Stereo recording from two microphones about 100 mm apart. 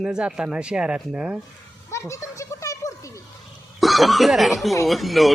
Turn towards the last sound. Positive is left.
turn(degrees=0)  # may be behind; listen again after turning